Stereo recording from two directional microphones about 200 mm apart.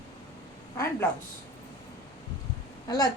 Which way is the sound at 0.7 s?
15° left (ahead or behind).